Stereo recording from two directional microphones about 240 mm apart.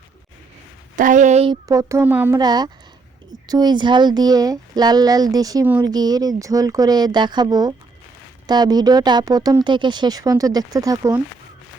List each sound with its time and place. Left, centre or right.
0.9 s speech: right
1.6 s speech: centre